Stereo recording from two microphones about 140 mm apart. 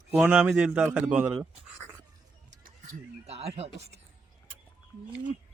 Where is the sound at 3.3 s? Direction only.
45° right (ahead or behind).